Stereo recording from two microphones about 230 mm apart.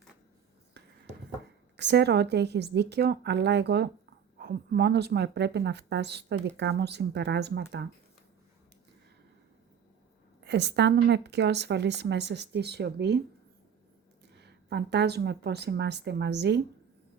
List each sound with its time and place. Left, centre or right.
1.7 s a woman's voice: right
10.4 s a woman's voice: right
14.3 s a woman's voice: right